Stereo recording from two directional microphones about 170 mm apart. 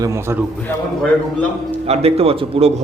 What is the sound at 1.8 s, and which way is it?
Speech, 35° right (ahead or behind).